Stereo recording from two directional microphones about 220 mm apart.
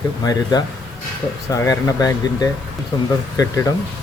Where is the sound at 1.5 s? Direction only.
15° left (ahead or behind).